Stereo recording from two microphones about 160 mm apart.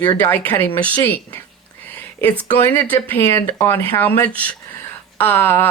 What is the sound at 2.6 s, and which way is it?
Speech, 15° left (ahead or behind).